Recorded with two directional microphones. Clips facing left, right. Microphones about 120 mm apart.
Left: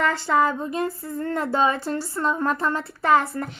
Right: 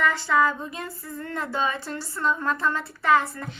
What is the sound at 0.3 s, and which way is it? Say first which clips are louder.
Speech: left 2 dB; 40° left (ahead or behind).